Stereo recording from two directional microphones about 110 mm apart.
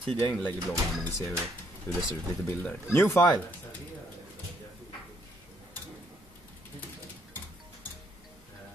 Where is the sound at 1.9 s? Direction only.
20° left (ahead or behind).